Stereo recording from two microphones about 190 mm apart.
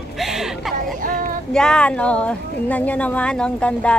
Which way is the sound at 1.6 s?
5° left (ahead or behind).